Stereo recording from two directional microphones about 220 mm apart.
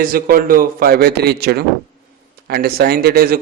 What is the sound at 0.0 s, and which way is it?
A man's voice, 40° right (ahead or behind).